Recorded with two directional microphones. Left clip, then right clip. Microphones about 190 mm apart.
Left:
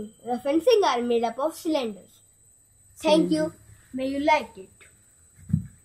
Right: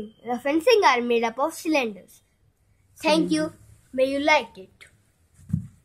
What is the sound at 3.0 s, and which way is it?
A child's voice, 15° right (ahead or behind).